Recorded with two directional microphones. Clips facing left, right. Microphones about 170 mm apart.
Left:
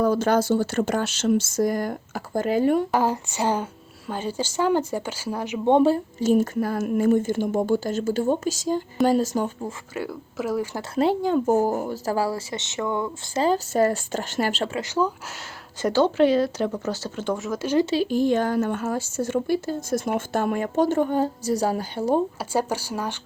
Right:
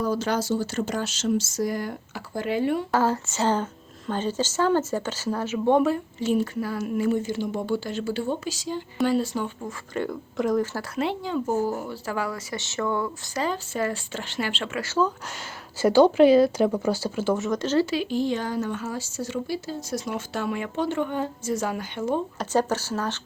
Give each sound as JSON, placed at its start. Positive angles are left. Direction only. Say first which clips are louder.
{"t": 0.0, "sound": "speech", "louder": "left 5 dB", "side_deg": 55}
{"t": 2.9, "sound": "speech", "louder": "even", "side_deg": 15}
{"t": 5.8, "sound": "speech", "louder": "left 4 dB", "side_deg": 35}
{"t": 9.9, "sound": "speech", "louder": "right 2 dB", "side_deg": 5}
{"t": 10.9, "sound": "speech", "louder": "left 7 dB", "side_deg": 40}
{"t": 12.5, "sound": "speech", "louder": "right 4 dB", "side_deg": 20}
{"t": 13.4, "sound": "a woman's voice", "louder": "left 7 dB", "side_deg": 40}
{"t": 14.8, "sound": "speech", "louder": "right 2 dB", "side_deg": 15}
{"t": 15.8, "sound": "speech", "louder": "right 3 dB", "side_deg": -10}
{"t": 18.1, "sound": "speech", "louder": "left 5 dB", "side_deg": 50}
{"t": 22.4, "sound": "speech", "louder": "right 1 dB", "side_deg": 10}